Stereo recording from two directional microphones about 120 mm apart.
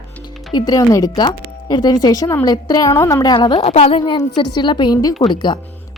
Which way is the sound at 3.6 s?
55° left (ahead or behind).